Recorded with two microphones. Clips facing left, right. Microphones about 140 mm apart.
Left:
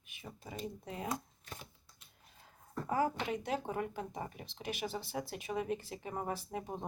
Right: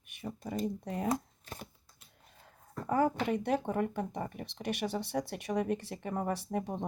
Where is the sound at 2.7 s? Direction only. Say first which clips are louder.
Right 4 dB; 50° right (ahead or behind).